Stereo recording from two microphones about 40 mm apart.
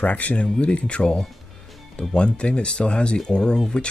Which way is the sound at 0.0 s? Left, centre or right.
Left.